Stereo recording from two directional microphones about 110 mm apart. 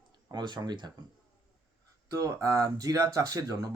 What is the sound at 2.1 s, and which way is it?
Speech, 25° right (ahead or behind).